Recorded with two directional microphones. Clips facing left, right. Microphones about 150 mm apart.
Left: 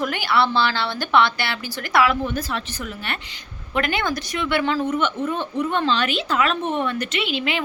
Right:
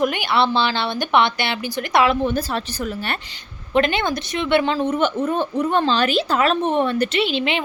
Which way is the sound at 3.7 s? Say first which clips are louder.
Right 4 dB; 25° right (ahead or behind).